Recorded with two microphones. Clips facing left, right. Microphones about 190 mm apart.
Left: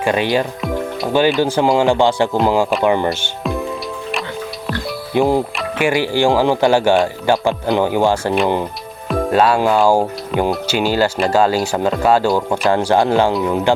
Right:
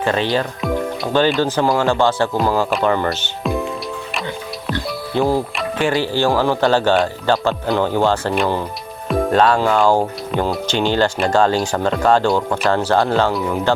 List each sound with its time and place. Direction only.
0.0 s speech: 15° left (ahead or behind)
5.1 s speech: 15° left (ahead or behind)
12.7 s speech: 15° left (ahead or behind)